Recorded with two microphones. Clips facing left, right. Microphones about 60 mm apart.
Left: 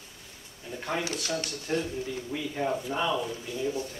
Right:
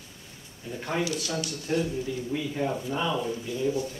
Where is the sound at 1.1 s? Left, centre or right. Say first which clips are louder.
Right 1 dB; left.